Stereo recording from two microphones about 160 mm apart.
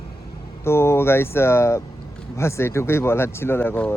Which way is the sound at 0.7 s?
15° left (ahead or behind).